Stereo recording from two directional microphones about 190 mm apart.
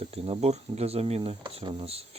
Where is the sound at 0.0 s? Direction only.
30° right (ahead or behind).